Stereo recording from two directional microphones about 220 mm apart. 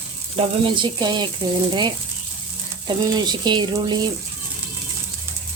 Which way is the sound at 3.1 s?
20° right (ahead or behind).